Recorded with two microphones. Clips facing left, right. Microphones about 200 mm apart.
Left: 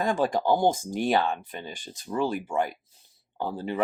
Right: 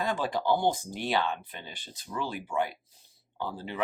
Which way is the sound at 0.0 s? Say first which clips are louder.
Left 5 dB; 45° left (ahead or behind).